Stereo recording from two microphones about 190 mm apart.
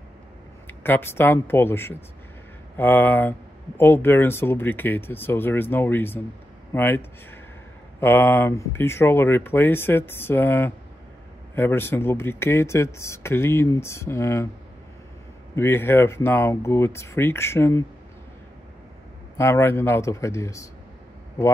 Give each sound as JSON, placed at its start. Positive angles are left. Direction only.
{"t": 0.7, "sound": "speech", "side_deg": 10}
{"t": 15.5, "sound": "speech", "side_deg": 10}
{"t": 19.3, "sound": "speech", "side_deg": 15}